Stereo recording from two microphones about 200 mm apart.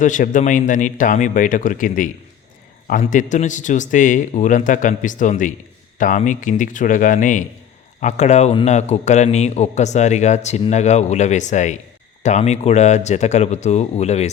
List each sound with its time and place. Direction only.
0.0 s a man's voice: 40° left (ahead or behind)